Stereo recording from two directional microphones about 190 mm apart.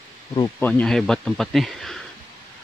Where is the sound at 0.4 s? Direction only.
10° left (ahead or behind).